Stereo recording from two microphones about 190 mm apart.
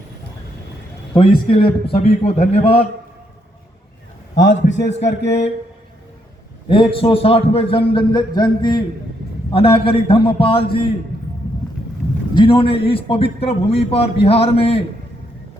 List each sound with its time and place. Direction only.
1.1 s a man's voice: 25° left (ahead or behind)
4.7 s a man's voice: 65° left (ahead or behind)
4.9 s a man's voice: 35° left (ahead or behind)
6.7 s a man's voice: 25° left (ahead or behind)
12.3 s a man's voice: 25° left (ahead or behind)